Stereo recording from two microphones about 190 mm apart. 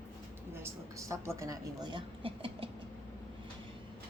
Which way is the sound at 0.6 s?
15° right (ahead or behind).